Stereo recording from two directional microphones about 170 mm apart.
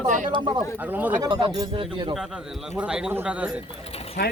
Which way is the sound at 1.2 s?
25° right (ahead or behind).